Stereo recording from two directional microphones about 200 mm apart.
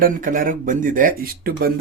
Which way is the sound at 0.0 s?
40° right (ahead or behind).